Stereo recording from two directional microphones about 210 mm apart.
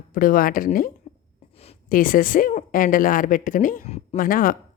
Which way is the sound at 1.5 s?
30° left (ahead or behind).